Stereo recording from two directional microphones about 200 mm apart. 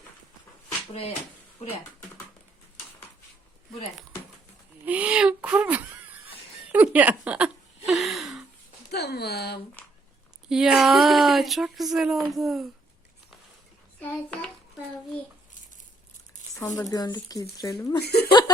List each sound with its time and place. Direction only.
4.9 s speech: 5° right (ahead or behind)
6.2 s a sound: 5° right (ahead or behind)
7.9 s gasp: centre (ahead or behind)
8.9 s speech: 55° left (ahead or behind)
10.5 s speech: 5° right (ahead or behind)
14.0 s hands: 5° left (ahead or behind)
16.6 s speech: 15° left (ahead or behind)
18.0 s speech: 55° left (ahead or behind)
18.3 s speech: 20° left (ahead or behind)